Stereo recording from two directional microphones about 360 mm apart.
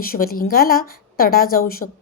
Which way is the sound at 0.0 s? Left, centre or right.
Left.